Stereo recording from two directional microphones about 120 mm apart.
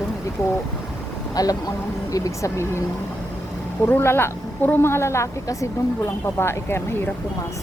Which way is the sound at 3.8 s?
20° left (ahead or behind).